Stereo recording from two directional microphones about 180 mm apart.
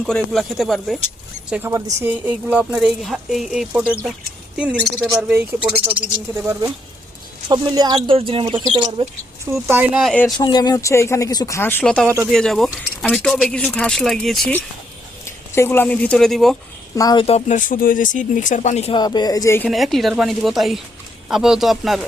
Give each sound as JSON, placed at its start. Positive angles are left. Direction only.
{"t": 0.0, "sound": "speech", "side_deg": 0}
{"t": 1.5, "sound": "speech", "side_deg": -10}
{"t": 9.5, "sound": "speech", "side_deg": -10}
{"t": 10.3, "sound": "speech", "side_deg": 25}
{"t": 12.0, "sound": "speech", "side_deg": -15}
{"t": 12.3, "sound": "speech", "side_deg": 0}
{"t": 15.5, "sound": "speech", "side_deg": 15}
{"t": 16.9, "sound": "speech", "side_deg": 20}
{"t": 17.2, "sound": "speech", "side_deg": 40}
{"t": 18.9, "sound": "speech", "side_deg": 25}
{"t": 19.7, "sound": "speech", "side_deg": 0}